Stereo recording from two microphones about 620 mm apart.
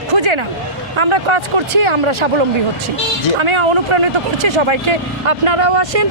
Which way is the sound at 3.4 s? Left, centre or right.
Right.